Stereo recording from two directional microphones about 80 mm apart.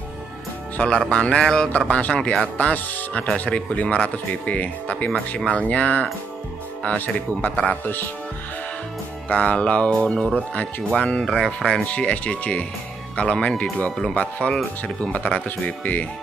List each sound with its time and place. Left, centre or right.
0.7 s speech: centre; by 8.1 s left
9.3 s speech: centre
11.9 s speech: centre